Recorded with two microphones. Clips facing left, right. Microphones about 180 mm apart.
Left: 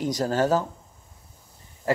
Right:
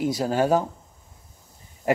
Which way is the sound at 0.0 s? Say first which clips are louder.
Right 1 dB; 10° right (ahead or behind).